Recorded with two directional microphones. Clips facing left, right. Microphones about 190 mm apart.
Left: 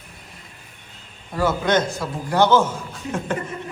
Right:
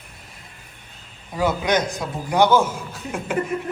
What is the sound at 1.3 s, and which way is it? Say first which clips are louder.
A man's voice: left 1 dB; 15° right (ahead or behind).